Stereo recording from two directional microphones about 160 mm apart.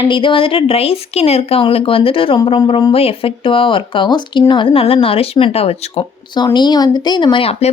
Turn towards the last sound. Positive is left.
turn(degrees=35)  # may be behind; listen again after turning